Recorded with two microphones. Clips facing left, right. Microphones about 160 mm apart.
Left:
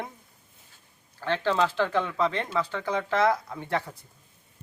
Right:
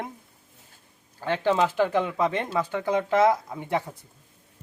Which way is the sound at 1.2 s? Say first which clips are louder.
Right 2 dB; 15° right (ahead or behind).